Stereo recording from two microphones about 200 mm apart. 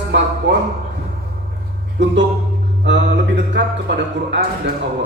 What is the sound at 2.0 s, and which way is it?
Speech, 65° right (ahead or behind).